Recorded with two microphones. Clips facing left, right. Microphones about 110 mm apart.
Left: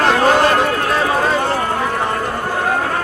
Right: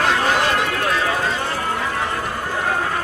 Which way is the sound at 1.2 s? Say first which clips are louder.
Left 6 dB; 55° left (ahead or behind).